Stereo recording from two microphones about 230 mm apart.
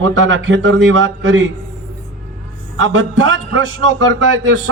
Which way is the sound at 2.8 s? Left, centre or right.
Right.